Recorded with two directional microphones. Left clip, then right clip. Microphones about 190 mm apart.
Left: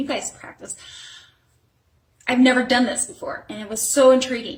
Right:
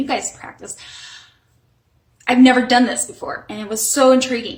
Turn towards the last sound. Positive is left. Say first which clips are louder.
# right 1 dB
turn(degrees=-15)  # may be behind; listen again after turning